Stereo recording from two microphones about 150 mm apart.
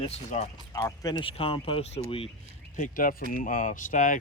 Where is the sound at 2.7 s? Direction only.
65° left (ahead or behind).